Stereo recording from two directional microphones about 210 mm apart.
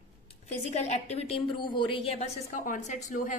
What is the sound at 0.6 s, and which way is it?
A woman's voice, 30° left (ahead or behind).